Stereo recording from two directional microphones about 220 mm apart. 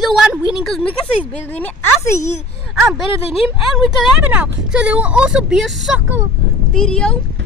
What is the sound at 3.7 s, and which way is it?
Speech, centre (ahead or behind).